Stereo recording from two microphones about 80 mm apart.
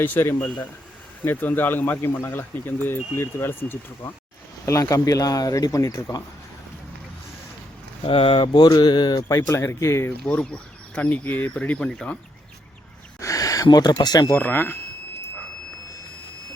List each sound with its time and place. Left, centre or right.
0.0 s speech: left
4.6 s speech: left
8.0 s speech: left
9.3 s speech: left
10.1 s speech: centre
13.1 s a sound: left
13.7 s speech: left
14.3 s speech: left